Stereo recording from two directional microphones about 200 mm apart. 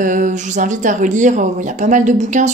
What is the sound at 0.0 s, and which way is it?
Speech, 40° right (ahead or behind).